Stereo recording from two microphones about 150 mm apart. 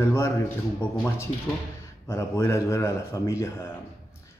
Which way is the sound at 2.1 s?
20° left (ahead or behind).